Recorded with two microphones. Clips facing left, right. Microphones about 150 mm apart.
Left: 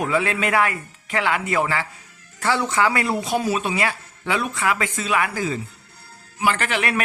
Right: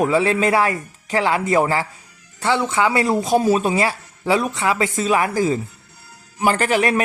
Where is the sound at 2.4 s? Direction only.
20° right (ahead or behind).